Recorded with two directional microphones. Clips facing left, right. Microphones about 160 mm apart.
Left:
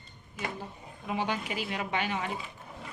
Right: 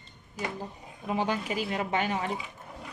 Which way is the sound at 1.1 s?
35° right (ahead or behind).